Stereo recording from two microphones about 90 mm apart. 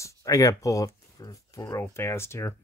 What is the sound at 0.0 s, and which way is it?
Speech, 40° left (ahead or behind).